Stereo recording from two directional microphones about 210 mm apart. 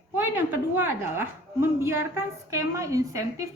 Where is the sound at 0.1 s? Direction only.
10° right (ahead or behind).